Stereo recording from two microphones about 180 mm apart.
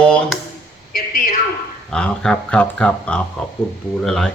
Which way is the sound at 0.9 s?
55° left (ahead or behind).